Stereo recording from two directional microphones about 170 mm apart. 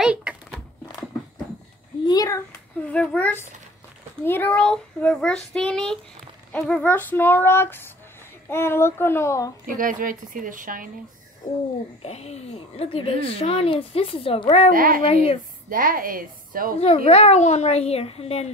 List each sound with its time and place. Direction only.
0.0 s a sound: 5° right (ahead or behind)
2.0 s a child's voice: 20° left (ahead or behind)
2.9 s a child's voice: 5° left (ahead or behind)
9.8 s a woman's voice: 55° right (ahead or behind)
12.0 s a woman's voice: 40° left (ahead or behind)
14.7 s a woman's voice: 55° right (ahead or behind)
16.8 s a woman's voice: 35° left (ahead or behind)